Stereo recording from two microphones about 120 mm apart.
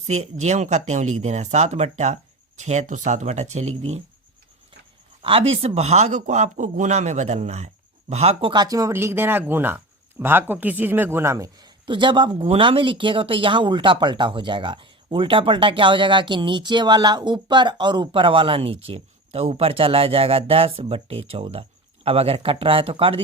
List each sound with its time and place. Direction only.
0.0 s speech: 70° right (ahead or behind)
5.2 s speech: 55° right (ahead or behind); by 11.7 s 30° right (ahead or behind)
11.9 s speech: 40° right (ahead or behind)